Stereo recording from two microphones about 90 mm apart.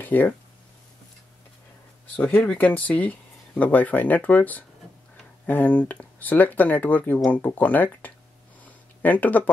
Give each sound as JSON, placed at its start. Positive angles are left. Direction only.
{"t": 0.0, "sound": "speech", "side_deg": 20}
{"t": 2.1, "sound": "speech", "side_deg": 20}
{"t": 8.6, "sound": "a sound", "side_deg": 20}